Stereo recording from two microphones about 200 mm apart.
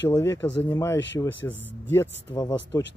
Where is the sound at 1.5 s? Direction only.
65° left (ahead or behind).